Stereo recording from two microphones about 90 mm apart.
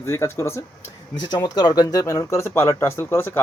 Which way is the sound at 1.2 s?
55° left (ahead or behind).